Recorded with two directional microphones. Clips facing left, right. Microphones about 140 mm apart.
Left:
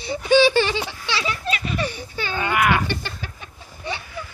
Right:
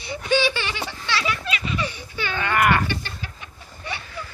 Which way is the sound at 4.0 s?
15° left (ahead or behind).